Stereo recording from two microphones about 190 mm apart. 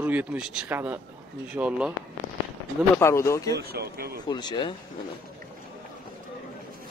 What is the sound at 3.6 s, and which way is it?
Speech, 55° right (ahead or behind).